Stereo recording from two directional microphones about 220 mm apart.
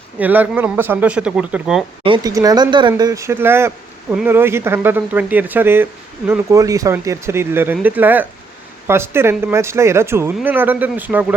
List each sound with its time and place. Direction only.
0.2 s speech: 10° right (ahead or behind)
2.0 s speech: 20° right (ahead or behind)